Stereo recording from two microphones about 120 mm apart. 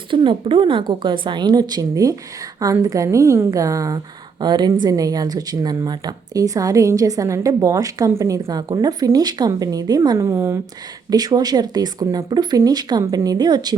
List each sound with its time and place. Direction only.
0.1 s a woman's voice: 45° right (ahead or behind); by 10.6 s 20° right (ahead or behind)
11.1 s speech: 35° right (ahead or behind)